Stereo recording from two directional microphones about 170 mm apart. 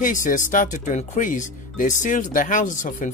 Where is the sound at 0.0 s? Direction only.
50° left (ahead or behind).